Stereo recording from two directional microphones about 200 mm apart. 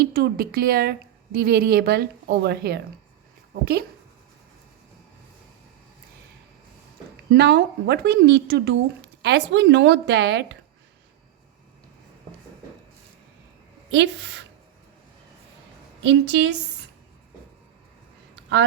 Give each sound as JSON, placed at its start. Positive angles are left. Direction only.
{"t": 0.0, "sound": "a woman's voice", "side_deg": -50}
{"t": 7.3, "sound": "a woman's voice", "side_deg": -55}
{"t": 13.9, "sound": "a woman's voice", "side_deg": -60}
{"t": 16.0, "sound": "a woman's voice", "side_deg": -60}